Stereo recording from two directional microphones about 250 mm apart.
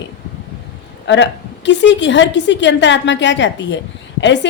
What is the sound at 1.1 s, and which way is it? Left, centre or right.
A woman's voice, left.